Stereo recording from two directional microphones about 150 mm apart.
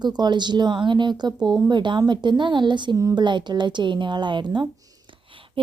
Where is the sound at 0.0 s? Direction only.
30° right (ahead or behind).